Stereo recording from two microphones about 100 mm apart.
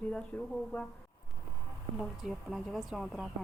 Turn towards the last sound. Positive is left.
turn(degrees=0)  # may be behind; listen again after turning